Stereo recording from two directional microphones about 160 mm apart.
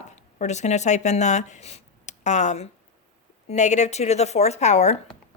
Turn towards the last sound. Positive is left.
turn(degrees=45)  # may be behind; listen again after turning